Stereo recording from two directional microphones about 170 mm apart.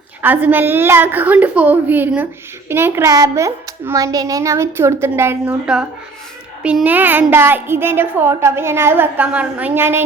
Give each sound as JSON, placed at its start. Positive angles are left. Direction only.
{"t": 0.2, "sound": "a woman's voice", "side_deg": -10}